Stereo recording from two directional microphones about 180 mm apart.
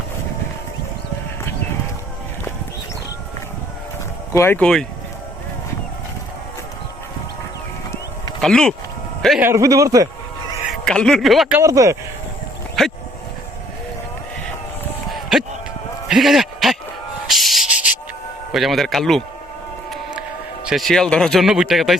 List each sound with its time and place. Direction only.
4.4 s speech: 10° left (ahead or behind)
8.4 s speech: 5° left (ahead or behind)
9.4 s a man's voice: 15° right (ahead or behind)
10.7 s speech: 5° left (ahead or behind)
11.6 s speech: 20° right (ahead or behind)
12.8 s dog: centre (ahead or behind)
15.1 s a sound: centre (ahead or behind)
17.2 s sanding: centre (ahead or behind)
18.5 s speech: centre (ahead or behind)
20.7 s speech: centre (ahead or behind)